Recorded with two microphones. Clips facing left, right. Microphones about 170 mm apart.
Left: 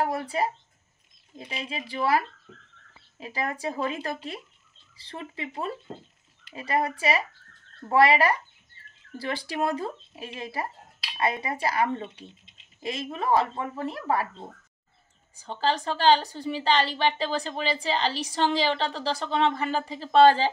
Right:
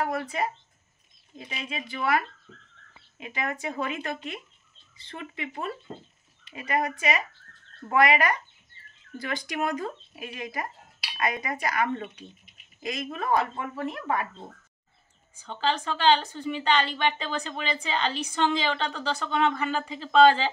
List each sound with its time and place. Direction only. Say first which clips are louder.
0.0 s a woman's voice: left 2 dB; 30° left (ahead or behind)
15.3 s a woman's voice: left 1 dB; 40° left (ahead or behind)